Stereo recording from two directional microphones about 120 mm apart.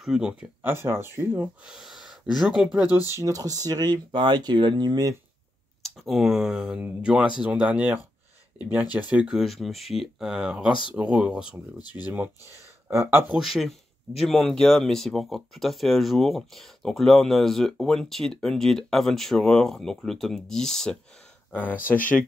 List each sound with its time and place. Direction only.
0.0 s speech: 5° right (ahead or behind)
0.6 s speech: 20° right (ahead or behind)
1.7 s speech: 5° right (ahead or behind)
3.1 s speech: 25° right (ahead or behind)
5.8 s speech: centre (ahead or behind)
11.9 s speech: 25° right (ahead or behind)
13.3 s speech: centre (ahead or behind)